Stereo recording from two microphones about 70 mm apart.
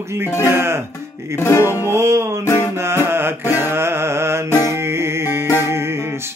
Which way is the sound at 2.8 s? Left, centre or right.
Right.